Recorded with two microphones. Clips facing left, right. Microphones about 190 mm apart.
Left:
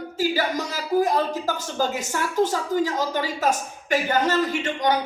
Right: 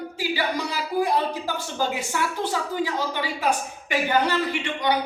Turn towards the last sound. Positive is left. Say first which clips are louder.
# left 2 dB
turn(degrees=45)  # may be behind; listen again after turning